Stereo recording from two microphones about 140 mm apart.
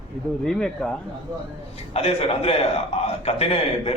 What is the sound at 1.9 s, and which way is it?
Speech, 45° left (ahead or behind).